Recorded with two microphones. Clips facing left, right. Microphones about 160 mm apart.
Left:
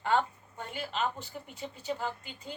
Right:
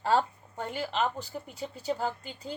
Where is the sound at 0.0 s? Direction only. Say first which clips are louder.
Right 2 dB; 35° right (ahead or behind).